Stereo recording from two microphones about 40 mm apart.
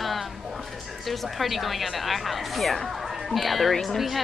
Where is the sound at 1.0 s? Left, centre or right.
Centre.